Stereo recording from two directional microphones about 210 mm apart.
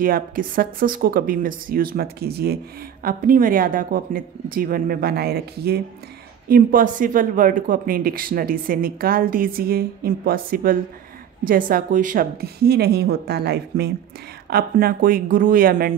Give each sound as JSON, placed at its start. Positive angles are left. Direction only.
{"t": 0.0, "sound": "speech", "side_deg": -45}